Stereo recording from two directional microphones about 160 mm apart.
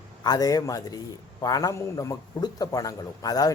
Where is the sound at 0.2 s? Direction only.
25° left (ahead or behind).